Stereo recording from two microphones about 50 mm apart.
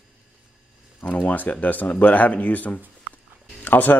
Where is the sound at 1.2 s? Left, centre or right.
Left.